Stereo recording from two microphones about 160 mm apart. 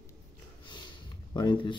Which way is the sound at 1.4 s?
30° left (ahead or behind).